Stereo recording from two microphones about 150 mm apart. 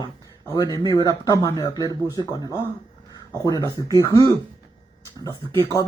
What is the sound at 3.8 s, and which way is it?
Speech, 25° left (ahead or behind).